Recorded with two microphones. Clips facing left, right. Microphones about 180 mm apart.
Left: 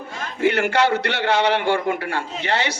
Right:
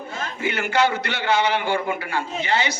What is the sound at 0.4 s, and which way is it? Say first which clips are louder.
A man's voice: left 3 dB; 70° left (ahead or behind).